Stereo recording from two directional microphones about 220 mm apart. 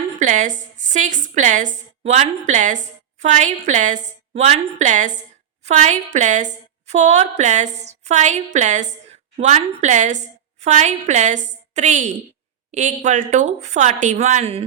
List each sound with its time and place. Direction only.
0.2 s a woman's voice: 35° right (ahead or behind)